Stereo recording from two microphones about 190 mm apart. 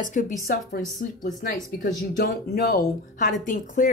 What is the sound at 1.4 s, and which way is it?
A woman's voice, 45° left (ahead or behind).